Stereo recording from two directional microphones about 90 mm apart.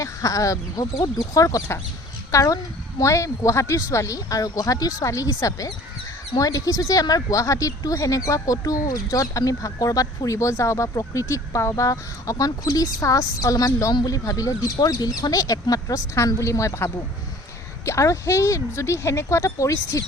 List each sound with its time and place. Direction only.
0.0 s speech: 40° left (ahead or behind)